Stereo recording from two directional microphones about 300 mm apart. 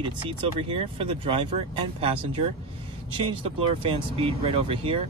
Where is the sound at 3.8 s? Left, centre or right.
Centre.